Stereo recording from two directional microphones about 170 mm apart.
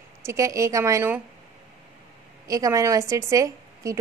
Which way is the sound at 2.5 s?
20° right (ahead or behind).